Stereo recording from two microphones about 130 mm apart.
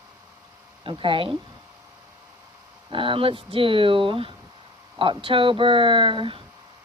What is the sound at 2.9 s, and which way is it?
A woman's voice, 40° right (ahead or behind).